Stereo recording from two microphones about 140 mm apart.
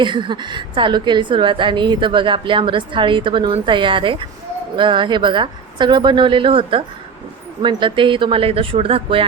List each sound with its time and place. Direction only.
0.0 s a woman's voice: 35° right (ahead or behind)